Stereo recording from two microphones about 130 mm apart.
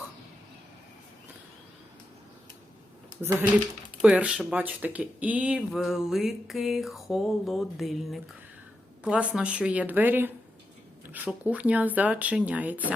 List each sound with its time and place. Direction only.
3.2 s speech: 20° right (ahead or behind)